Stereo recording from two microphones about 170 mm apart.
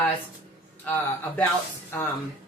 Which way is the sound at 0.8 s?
10° left (ahead or behind).